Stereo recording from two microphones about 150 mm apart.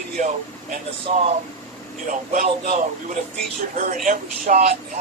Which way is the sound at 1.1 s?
55° right (ahead or behind).